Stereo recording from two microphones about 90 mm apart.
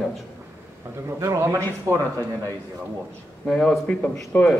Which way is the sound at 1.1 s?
35° right (ahead or behind).